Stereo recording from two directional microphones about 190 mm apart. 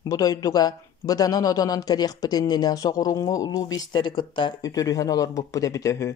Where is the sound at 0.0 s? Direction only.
20° left (ahead or behind).